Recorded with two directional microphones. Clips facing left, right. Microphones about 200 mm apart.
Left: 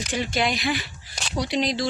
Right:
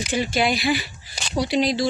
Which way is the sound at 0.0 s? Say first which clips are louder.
Right 3 dB; 5° right (ahead or behind).